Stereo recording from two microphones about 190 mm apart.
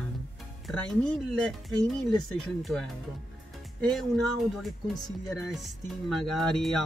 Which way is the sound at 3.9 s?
Centre (ahead or behind).